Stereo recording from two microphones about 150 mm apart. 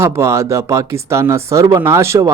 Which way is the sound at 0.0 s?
20° right (ahead or behind).